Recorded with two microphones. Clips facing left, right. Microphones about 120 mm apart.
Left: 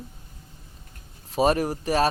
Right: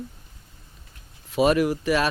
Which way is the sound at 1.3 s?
40° left (ahead or behind).